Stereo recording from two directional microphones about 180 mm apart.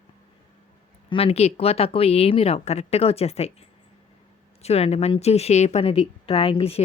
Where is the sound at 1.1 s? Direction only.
35° left (ahead or behind).